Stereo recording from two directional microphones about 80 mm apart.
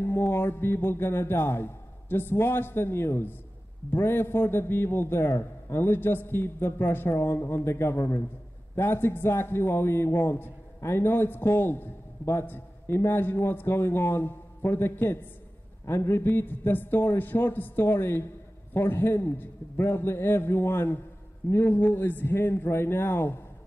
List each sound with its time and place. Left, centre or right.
0.0 s a man's voice: left